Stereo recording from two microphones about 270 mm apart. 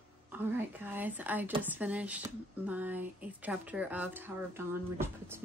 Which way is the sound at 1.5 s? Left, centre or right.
Centre.